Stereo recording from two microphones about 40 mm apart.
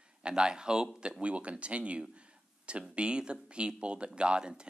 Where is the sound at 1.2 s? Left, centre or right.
Right.